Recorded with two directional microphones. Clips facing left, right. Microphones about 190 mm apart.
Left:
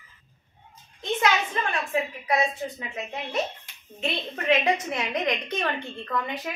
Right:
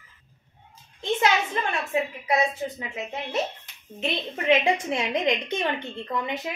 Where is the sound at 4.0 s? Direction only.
20° right (ahead or behind).